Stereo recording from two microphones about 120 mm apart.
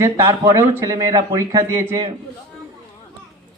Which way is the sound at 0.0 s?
20° right (ahead or behind).